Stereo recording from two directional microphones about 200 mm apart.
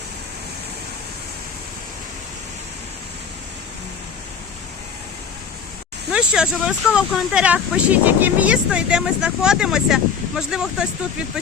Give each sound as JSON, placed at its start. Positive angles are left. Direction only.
{"t": 6.1, "sound": "speech", "side_deg": -5}